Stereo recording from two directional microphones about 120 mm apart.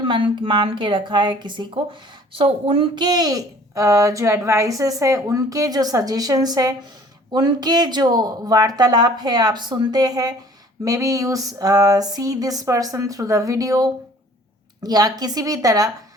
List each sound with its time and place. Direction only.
0.0 s a woman's voice: 45° right (ahead or behind)
10.8 s a sound: 30° right (ahead or behind)
14.8 s a woman's voice: 35° right (ahead or behind)